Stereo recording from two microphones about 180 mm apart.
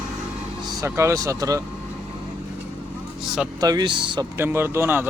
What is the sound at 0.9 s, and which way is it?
Speech, 15° right (ahead or behind).